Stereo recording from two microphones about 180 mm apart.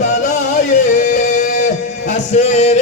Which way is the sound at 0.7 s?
45° left (ahead or behind).